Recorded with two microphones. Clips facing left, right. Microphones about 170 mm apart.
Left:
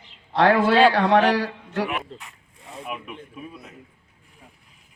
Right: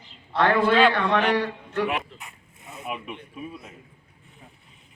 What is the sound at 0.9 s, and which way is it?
Speech, 90° left.